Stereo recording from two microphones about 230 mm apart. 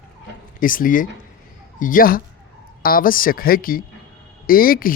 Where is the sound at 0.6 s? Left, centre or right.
Left.